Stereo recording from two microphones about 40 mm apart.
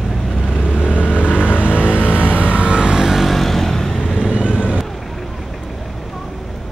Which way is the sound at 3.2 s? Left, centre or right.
Centre.